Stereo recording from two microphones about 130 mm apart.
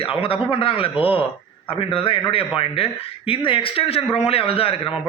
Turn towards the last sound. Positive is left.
turn(degrees=45)  # may be behind; listen again after turning